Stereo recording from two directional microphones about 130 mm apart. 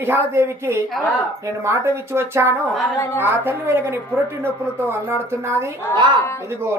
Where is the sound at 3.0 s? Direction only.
20° left (ahead or behind).